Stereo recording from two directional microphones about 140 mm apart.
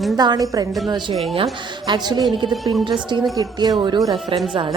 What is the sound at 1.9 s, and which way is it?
Speech, 30° right (ahead or behind).